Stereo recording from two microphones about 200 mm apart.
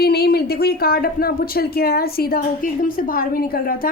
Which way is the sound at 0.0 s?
50° left (ahead or behind).